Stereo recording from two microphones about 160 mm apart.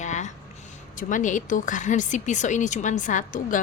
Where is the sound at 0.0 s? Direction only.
50° left (ahead or behind).